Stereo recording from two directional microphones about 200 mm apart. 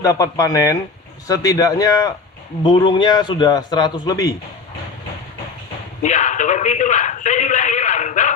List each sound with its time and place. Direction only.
0.0 s a man's voice: 15° left (ahead or behind)
6.0 s speech: 35° left (ahead or behind)